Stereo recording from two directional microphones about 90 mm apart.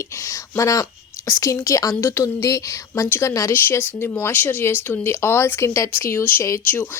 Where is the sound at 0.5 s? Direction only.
40° left (ahead or behind).